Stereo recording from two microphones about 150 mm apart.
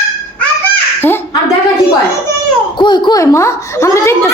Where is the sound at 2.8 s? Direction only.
30° left (ahead or behind).